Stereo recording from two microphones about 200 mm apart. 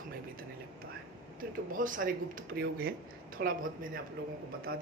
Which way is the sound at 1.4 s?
40° right (ahead or behind).